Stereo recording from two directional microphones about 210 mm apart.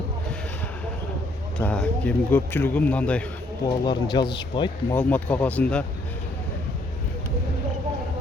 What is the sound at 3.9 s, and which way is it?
Speech, 20° left (ahead or behind).